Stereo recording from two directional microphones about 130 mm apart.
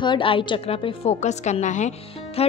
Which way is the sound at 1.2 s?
60° left (ahead or behind).